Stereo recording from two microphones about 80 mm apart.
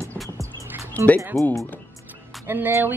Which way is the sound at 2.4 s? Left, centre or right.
Right.